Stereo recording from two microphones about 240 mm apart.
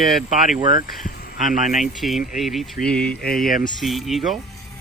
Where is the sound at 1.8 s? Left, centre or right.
Centre.